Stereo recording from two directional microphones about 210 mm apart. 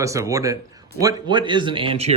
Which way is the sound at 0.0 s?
15° right (ahead or behind).